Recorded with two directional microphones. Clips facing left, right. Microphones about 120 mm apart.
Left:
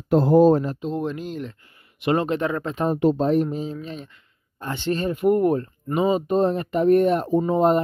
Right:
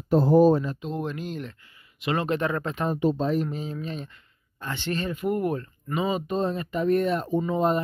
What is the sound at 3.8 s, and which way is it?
Speech, 15° left (ahead or behind).